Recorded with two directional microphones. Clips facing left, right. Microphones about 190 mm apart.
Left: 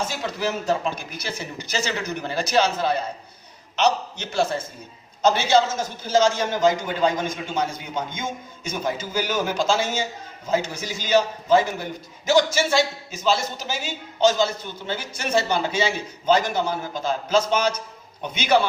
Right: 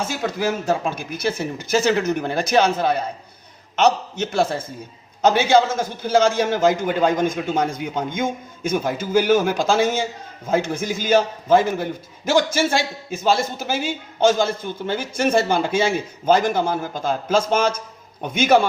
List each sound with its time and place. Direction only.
0.1 s a man's voice: 50° right (ahead or behind)